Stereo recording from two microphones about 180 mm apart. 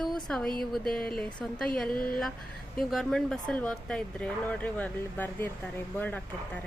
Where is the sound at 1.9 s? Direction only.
55° left (ahead or behind).